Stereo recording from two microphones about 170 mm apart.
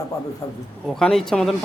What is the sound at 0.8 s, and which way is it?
Speech, 5° left (ahead or behind).